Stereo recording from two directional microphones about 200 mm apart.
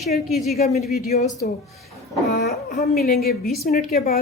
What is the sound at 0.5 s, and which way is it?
Speech, 35° left (ahead or behind).